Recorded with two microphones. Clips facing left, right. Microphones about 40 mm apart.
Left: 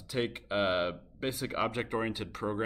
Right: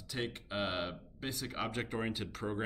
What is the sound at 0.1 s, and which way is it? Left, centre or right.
Speech, left.